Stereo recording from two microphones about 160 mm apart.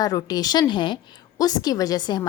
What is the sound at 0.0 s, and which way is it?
A woman's voice, 25° left (ahead or behind).